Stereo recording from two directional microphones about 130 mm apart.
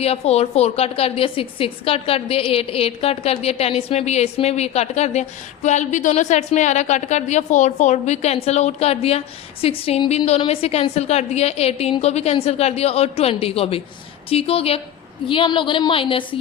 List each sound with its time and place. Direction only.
0.0 s a woman's voice: 50° left (ahead or behind)